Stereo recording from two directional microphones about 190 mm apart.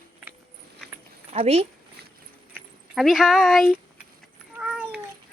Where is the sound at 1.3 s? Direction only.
35° right (ahead or behind).